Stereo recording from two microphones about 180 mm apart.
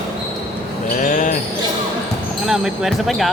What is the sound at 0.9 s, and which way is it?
Basketball bounce, 45° left (ahead or behind).